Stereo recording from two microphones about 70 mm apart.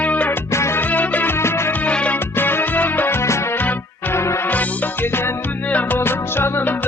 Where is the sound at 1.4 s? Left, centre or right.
Left.